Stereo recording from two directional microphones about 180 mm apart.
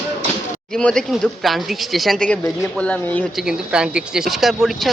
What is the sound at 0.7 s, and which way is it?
Speech, 5° left (ahead or behind).